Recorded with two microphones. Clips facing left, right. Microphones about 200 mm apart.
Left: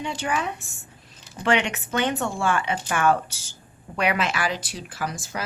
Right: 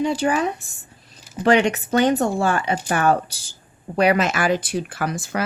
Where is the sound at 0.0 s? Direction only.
35° right (ahead or behind).